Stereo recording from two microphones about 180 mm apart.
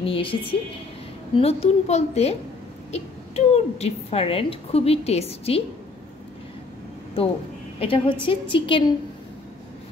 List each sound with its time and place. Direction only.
0.0 s a woman's voice: 30° left (ahead or behind)
7.8 s a woman's voice: 30° left (ahead or behind)